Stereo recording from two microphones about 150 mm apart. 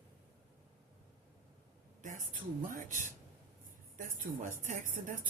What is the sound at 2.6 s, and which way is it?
A woman's voice, 65° right (ahead or behind).